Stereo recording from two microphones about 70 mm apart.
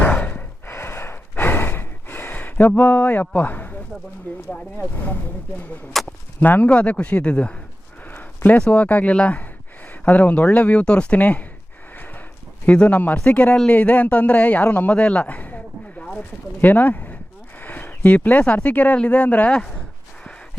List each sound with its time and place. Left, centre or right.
0.0 s gasp: left
0.7 s gasp: left
4.8 s speech: left
6.0 s speech: centre
6.4 s speech: left
8.0 s a sound: left
8.4 s speech: centre
12.6 s speech: centre